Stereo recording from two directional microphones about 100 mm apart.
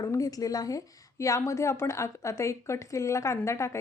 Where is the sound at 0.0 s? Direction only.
35° left (ahead or behind).